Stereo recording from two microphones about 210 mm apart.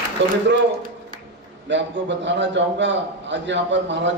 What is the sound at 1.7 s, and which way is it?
A man's voice, 60° right (ahead or behind).